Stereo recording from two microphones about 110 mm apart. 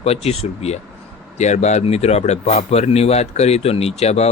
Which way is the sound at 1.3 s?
90° left.